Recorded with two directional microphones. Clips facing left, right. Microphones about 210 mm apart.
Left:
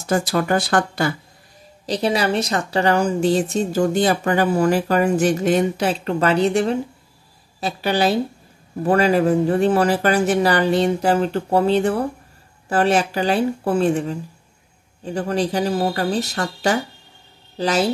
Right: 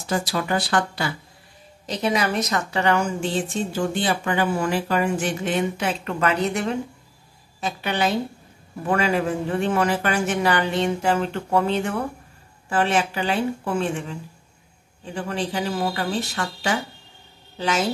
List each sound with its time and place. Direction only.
0.0 s speech: 50° left (ahead or behind)
1.9 s a woman's voice: 35° left (ahead or behind)
15.1 s a woman's voice: 40° left (ahead or behind)